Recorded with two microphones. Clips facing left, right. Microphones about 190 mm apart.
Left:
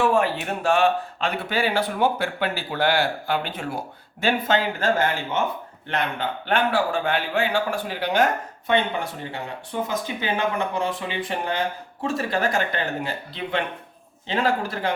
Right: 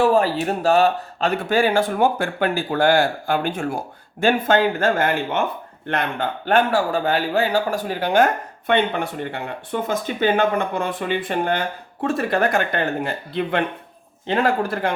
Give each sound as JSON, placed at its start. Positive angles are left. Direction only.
{"t": 0.0, "sound": "speech", "side_deg": -35}